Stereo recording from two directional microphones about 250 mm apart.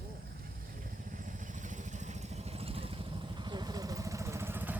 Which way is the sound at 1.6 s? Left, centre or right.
Right.